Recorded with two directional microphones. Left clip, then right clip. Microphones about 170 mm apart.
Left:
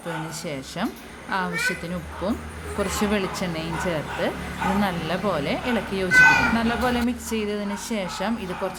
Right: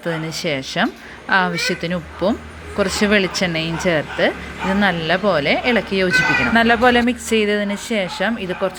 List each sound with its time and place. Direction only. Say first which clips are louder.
0.4 s speech: right 13 dB; 25° right (ahead or behind)